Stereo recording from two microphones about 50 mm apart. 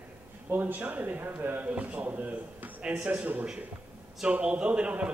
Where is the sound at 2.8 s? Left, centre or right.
Right.